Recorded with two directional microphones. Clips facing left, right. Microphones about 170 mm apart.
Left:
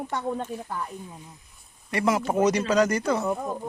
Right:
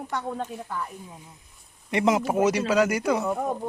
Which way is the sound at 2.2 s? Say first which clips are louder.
Even; 5° right (ahead or behind).